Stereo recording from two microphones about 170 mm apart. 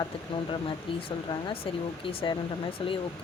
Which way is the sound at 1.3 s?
30° left (ahead or behind).